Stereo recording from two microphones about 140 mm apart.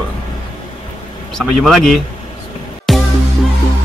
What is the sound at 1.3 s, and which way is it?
Speech, centre (ahead or behind).